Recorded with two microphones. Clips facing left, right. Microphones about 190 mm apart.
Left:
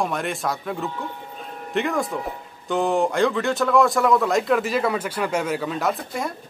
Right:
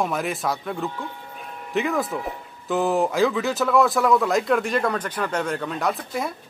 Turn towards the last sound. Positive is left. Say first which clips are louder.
# even
turn(degrees=0)  # may be behind; listen again after turning